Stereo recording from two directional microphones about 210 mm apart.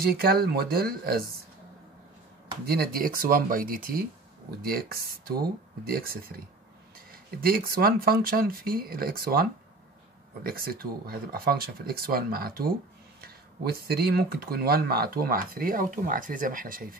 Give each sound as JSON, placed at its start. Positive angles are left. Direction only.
{"t": 0.0, "sound": "speech", "side_deg": -45}
{"t": 2.6, "sound": "speech", "side_deg": -45}